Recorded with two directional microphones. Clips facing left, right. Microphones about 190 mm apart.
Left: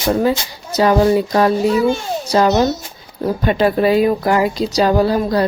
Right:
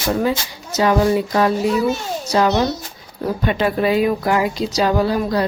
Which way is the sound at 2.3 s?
40° left (ahead or behind).